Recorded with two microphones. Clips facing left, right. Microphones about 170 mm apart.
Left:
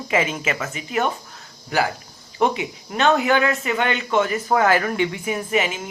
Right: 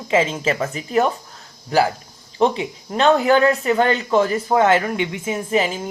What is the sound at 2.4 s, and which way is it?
Speech, 35° right (ahead or behind).